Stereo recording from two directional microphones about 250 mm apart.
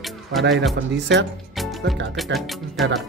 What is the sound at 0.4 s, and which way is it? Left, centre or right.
Speech, right.